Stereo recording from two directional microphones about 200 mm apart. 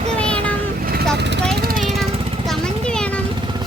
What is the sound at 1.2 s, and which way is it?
Vehicle, 60° right (ahead or behind).